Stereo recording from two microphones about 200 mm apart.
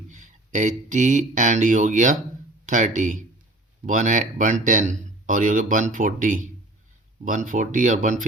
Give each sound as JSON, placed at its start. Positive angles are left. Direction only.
{"t": 0.1, "sound": "speech", "side_deg": -40}